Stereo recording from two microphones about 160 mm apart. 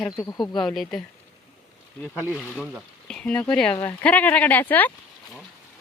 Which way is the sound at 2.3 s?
Centre (ahead or behind).